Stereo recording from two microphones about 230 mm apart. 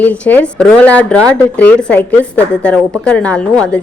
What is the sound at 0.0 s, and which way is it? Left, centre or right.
A woman's voice, centre.